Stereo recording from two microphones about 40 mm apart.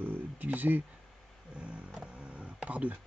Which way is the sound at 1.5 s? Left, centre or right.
Right.